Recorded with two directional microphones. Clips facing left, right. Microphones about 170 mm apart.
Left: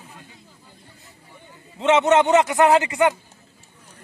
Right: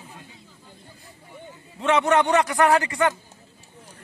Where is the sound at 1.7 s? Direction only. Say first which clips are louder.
Left 3 dB; 20° left (ahead or behind).